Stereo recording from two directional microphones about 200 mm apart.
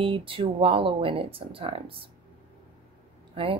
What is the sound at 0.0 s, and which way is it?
A woman's voice, 25° right (ahead or behind).